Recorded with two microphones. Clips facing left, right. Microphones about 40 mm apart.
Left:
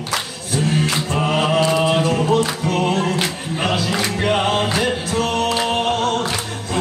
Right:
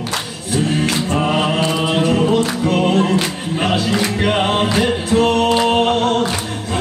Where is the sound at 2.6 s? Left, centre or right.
Right.